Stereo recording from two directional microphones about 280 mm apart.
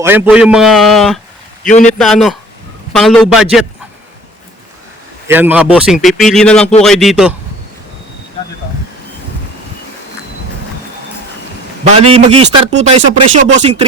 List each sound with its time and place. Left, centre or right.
0.0 s a man's voice: centre
5.3 s a man's voice: centre
11.9 s speech: right